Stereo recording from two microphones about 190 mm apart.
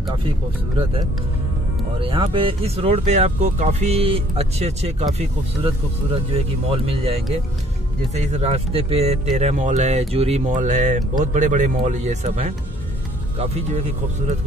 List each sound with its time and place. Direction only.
2.0 s speech: 30° right (ahead or behind)
6.3 s speech: 30° right (ahead or behind)
8.2 s speech: 35° right (ahead or behind)